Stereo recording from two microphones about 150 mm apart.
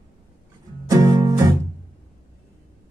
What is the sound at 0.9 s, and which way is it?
Music, 20° right (ahead or behind).